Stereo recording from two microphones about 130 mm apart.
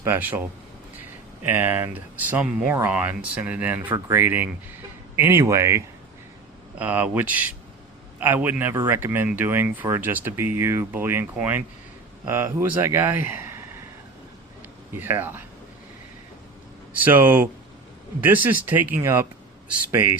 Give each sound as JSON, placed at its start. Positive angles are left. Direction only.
{"t": 0.0, "sound": "speech", "side_deg": -15}
{"t": 1.5, "sound": "speech", "side_deg": -15}
{"t": 6.7, "sound": "speech", "side_deg": -10}
{"t": 14.9, "sound": "speech", "side_deg": -15}
{"t": 17.0, "sound": "speech", "side_deg": -15}